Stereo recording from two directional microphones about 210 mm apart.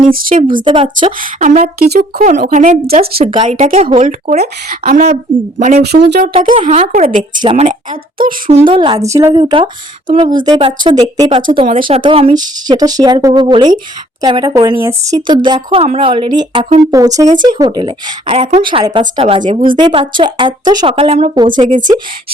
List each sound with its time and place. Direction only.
0.0 s a woman's voice: 40° right (ahead or behind)
0.6 s speech: 25° right (ahead or behind)
1.2 s speech: 40° right (ahead or behind)
2.2 s a woman's voice: 35° right (ahead or behind)
6.3 s a woman's voice: 25° right (ahead or behind); by 8.6 s 40° right (ahead or behind)
8.6 s a woman's voice: 25° right (ahead or behind)
9.4 s a woman's voice: 25° right (ahead or behind)